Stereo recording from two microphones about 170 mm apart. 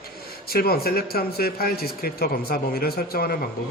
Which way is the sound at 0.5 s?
65° left (ahead or behind).